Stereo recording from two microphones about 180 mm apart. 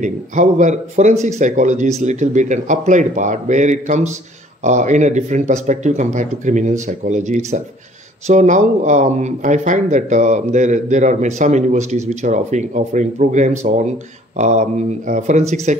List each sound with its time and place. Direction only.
0.0 s speech: 45° right (ahead or behind)